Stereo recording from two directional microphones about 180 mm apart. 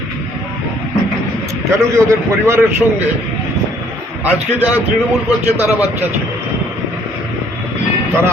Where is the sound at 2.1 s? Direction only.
15° right (ahead or behind).